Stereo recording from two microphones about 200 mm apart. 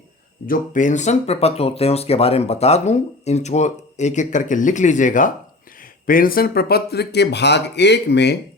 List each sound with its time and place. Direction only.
0.4 s speech: 45° left (ahead or behind)